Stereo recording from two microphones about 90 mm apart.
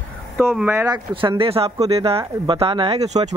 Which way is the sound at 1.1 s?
70° right (ahead or behind).